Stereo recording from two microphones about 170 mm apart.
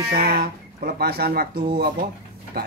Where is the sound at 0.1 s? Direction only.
65° right (ahead or behind).